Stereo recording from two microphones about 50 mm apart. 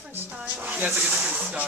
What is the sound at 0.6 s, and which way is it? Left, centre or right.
Speech, right.